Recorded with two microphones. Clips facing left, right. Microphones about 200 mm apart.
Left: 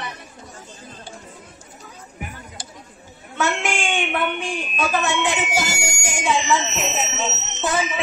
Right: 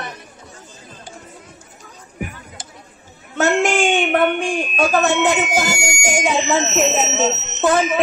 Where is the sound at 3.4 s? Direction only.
45° right (ahead or behind).